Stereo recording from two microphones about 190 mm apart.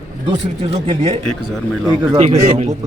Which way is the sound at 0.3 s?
30° right (ahead or behind).